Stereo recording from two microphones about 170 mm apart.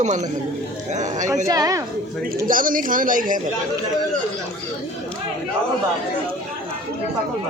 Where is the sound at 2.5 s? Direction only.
55° right (ahead or behind).